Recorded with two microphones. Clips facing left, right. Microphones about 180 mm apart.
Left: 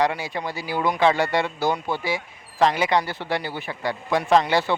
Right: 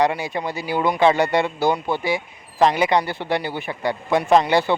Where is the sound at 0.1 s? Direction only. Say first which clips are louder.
Right 3 dB; 20° right (ahead or behind).